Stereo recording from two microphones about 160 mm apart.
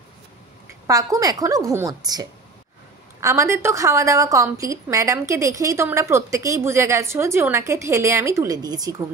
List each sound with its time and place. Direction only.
0.8 s a woman's voice: 20° right (ahead or behind)